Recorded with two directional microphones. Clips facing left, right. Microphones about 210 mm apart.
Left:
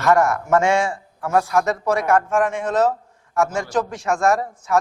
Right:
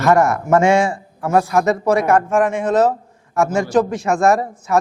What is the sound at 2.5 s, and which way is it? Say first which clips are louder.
Speech: right 4 dB; 5° right (ahead or behind).